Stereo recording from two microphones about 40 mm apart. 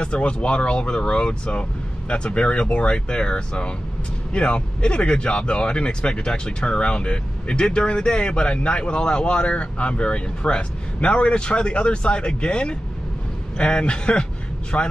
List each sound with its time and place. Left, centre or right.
0.0 s speech: left